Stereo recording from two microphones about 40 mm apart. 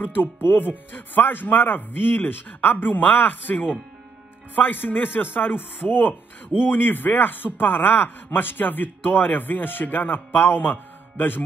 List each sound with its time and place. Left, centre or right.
0.0 s speech: left